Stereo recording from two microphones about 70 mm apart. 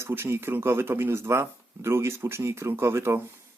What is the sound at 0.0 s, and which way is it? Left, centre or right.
Speech, right.